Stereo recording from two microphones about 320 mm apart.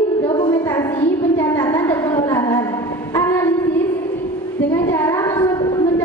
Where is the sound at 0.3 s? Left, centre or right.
Centre.